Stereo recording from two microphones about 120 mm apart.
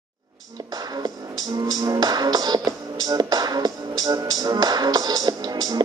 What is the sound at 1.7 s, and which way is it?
Music, 35° right (ahead or behind).